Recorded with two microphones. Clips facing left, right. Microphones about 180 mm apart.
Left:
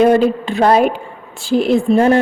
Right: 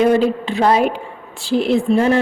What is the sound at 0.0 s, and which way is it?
A woman's voice, 50° left (ahead or behind).